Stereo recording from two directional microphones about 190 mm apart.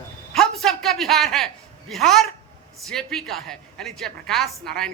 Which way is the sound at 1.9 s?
Centre (ahead or behind).